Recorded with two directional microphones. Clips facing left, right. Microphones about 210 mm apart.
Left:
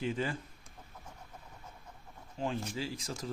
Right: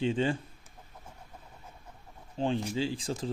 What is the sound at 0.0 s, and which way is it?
Speech, 30° right (ahead or behind).